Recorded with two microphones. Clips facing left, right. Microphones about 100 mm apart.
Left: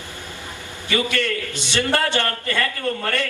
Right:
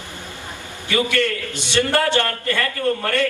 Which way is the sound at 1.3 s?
20° right (ahead or behind).